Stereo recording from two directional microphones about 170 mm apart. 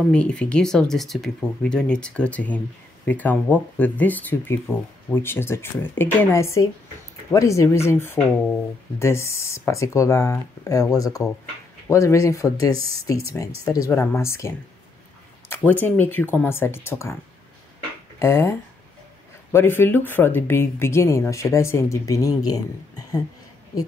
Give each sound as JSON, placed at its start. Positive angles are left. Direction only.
{"t": 0.1, "sound": "speech", "side_deg": 5}
{"t": 18.2, "sound": "speech", "side_deg": 15}